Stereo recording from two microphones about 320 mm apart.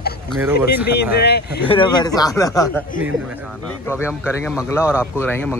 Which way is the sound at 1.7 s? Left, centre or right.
Centre.